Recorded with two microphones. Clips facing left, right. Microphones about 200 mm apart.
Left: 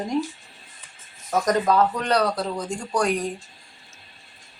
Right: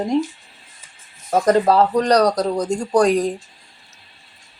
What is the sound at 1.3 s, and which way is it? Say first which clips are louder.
Speech: right 6 dB; 30° right (ahead or behind).